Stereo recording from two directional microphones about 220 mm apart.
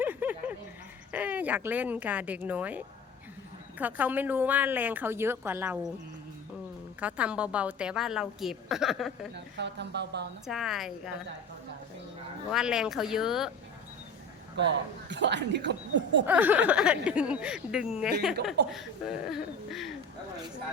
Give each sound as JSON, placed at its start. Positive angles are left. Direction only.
{"t": 0.0, "sound": "a sound", "side_deg": -10}
{"t": 1.1, "sound": "a woman's voice", "side_deg": -5}
{"t": 7.0, "sound": "speech", "side_deg": -5}
{"t": 9.3, "sound": "speech", "side_deg": -50}
{"t": 10.4, "sound": "speech", "side_deg": 0}
{"t": 12.5, "sound": "speech", "side_deg": -5}
{"t": 14.5, "sound": "speech", "side_deg": -55}
{"t": 16.2, "sound": "speech", "side_deg": -10}